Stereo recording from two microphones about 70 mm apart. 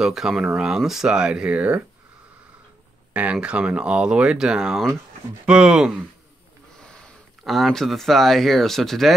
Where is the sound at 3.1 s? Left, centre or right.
Centre.